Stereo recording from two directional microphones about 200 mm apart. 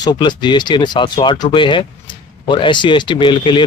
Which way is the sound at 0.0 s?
20° left (ahead or behind).